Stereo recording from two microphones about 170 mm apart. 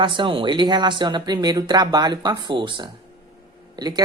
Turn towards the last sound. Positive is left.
turn(degrees=-25)  # may be behind; listen again after turning